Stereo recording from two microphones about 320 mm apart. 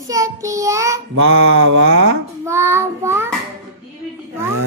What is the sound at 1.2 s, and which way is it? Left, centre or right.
A man's voice, right.